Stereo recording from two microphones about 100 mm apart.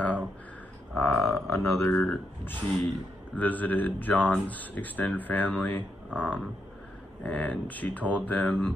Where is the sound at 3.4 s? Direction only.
15° left (ahead or behind).